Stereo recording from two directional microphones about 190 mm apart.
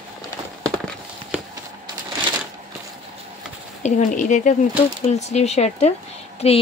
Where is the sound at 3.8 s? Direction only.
40° left (ahead or behind).